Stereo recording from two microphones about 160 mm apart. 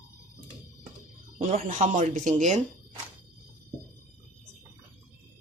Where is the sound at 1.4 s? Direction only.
50° right (ahead or behind).